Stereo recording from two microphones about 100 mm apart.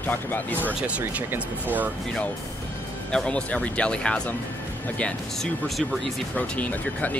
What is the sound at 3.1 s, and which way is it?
Speech, 10° left (ahead or behind).